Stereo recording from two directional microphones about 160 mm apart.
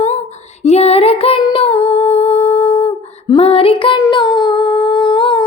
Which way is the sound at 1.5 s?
40° left (ahead or behind).